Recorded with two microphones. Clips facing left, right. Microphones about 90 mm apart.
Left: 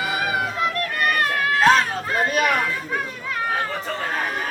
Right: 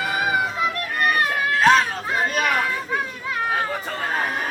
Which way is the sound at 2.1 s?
Centre (ahead or behind).